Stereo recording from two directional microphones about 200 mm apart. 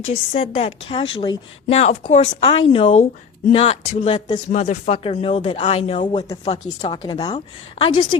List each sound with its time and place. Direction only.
0.0 s a woman's voice: 25° left (ahead or behind)
6.1 s a woman's voice: 20° left (ahead or behind)